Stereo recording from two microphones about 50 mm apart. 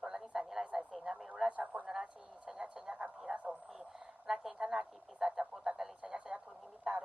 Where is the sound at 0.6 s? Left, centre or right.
Right.